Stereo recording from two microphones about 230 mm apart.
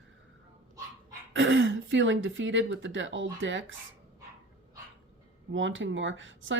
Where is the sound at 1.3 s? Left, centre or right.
Right.